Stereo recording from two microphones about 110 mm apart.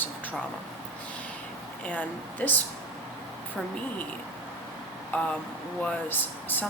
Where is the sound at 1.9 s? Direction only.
15° left (ahead or behind).